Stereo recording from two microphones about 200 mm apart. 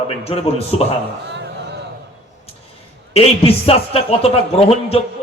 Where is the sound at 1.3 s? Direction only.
55° right (ahead or behind).